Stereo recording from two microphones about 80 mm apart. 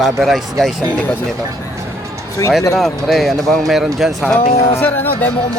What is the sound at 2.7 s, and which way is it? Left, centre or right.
Speech, centre.